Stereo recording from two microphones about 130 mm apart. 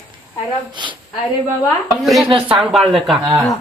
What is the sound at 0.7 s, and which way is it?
Speech, 35° right (ahead or behind).